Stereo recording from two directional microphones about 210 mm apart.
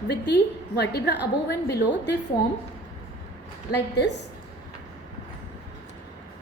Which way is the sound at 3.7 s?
55° left (ahead or behind).